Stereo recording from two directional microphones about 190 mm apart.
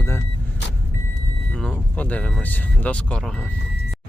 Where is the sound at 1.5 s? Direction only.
5° left (ahead or behind).